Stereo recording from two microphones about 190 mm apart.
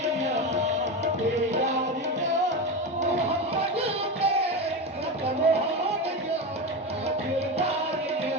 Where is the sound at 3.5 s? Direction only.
30° right (ahead or behind).